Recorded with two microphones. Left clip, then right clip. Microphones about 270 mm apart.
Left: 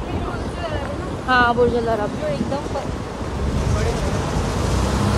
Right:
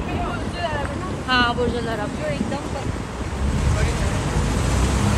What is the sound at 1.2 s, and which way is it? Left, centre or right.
Vehicle, left.